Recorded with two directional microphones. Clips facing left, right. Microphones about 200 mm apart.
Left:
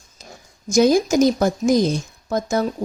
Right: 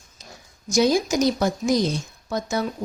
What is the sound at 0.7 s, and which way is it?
A woman's voice, 50° left (ahead or behind).